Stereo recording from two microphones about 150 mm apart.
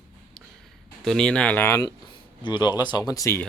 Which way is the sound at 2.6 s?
30° left (ahead or behind).